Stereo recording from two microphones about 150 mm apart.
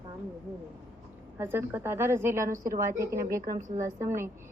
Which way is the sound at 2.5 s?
65° right (ahead or behind).